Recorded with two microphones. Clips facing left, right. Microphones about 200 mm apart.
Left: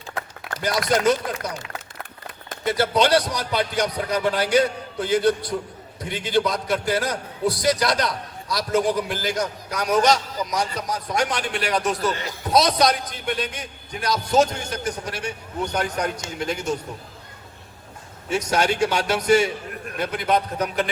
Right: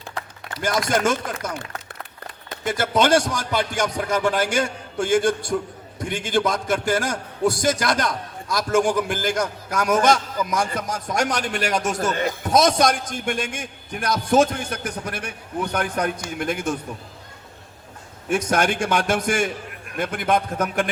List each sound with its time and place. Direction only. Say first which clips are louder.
0.6 s a man's voice: left 1 dB; 50° right (ahead or behind)
2.6 s a man's voice: even; 50° right (ahead or behind)
18.3 s a man's voice: right 1 dB; 50° right (ahead or behind)